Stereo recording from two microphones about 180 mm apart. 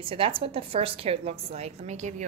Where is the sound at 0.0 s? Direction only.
30° right (ahead or behind).